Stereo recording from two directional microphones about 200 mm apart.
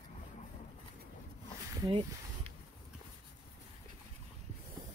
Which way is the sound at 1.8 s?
25° right (ahead or behind).